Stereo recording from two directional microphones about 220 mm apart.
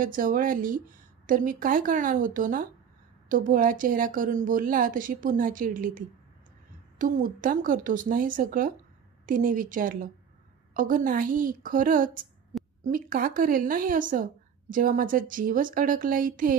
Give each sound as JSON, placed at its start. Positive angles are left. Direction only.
{"t": 0.0, "sound": "speech", "side_deg": -40}